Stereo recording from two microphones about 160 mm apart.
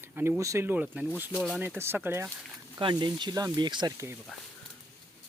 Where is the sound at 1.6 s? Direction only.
15° right (ahead or behind).